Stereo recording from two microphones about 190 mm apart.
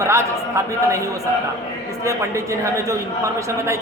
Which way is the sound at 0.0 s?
15° right (ahead or behind).